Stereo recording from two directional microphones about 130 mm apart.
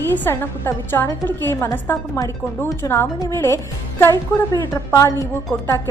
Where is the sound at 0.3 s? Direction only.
15° left (ahead or behind).